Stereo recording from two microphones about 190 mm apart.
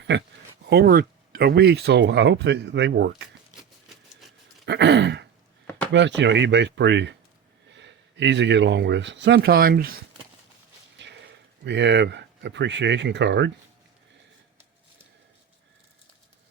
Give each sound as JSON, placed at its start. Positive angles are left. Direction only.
{"t": 0.1, "sound": "speech", "side_deg": -65}
{"t": 0.7, "sound": "speech", "side_deg": -55}
{"t": 3.5, "sound": "a sound", "side_deg": 0}
{"t": 4.6, "sound": "speech", "side_deg": -65}
{"t": 10.9, "sound": "speech", "side_deg": -70}